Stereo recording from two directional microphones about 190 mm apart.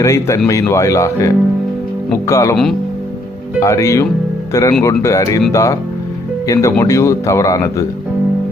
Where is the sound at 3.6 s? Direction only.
15° left (ahead or behind).